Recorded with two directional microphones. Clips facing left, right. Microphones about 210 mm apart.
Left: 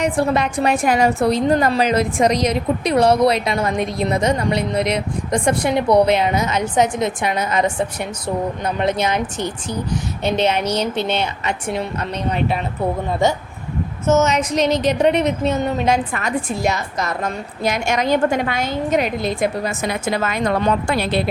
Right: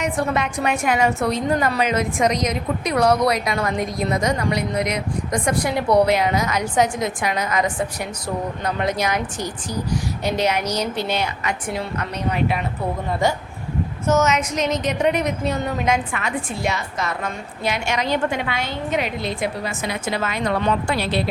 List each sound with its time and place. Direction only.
0.0 s a woman's voice: 35° left (ahead or behind)
14.1 s a woman's voice: 25° left (ahead or behind); by 21.2 s 50° left (ahead or behind)